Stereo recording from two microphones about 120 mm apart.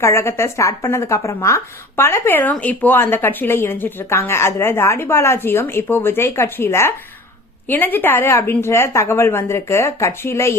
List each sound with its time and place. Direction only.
0.0 s a woman's voice: 20° left (ahead or behind)